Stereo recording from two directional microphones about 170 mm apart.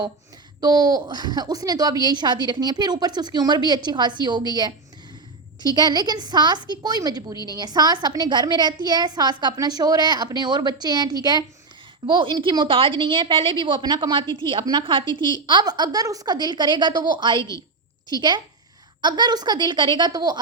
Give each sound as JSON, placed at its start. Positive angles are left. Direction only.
{"t": 0.6, "sound": "a woman's voice", "side_deg": -25}
{"t": 7.3, "sound": "a woman's voice", "side_deg": 20}
{"t": 7.6, "sound": "a woman's voice", "side_deg": -25}